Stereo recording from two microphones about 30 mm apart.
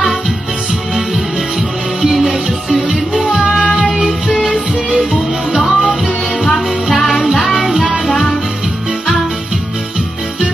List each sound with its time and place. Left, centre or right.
2.0 s music: centre
3.3 s music: right
5.7 s music: centre
7.0 s music: centre